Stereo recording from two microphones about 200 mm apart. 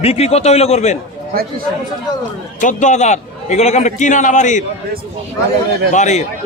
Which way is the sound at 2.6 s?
40° left (ahead or behind).